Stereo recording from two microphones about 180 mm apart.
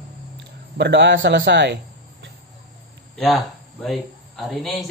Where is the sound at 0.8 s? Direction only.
70° right (ahead or behind).